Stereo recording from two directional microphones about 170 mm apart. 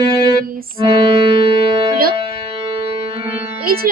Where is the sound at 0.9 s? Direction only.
25° right (ahead or behind).